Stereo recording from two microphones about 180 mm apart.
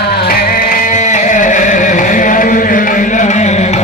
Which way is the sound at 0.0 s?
60° left (ahead or behind).